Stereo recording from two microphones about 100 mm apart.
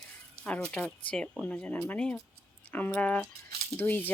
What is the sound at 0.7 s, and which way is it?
Speech, 10° left (ahead or behind).